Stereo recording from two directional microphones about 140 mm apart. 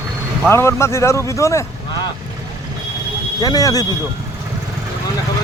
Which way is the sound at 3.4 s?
25° left (ahead or behind).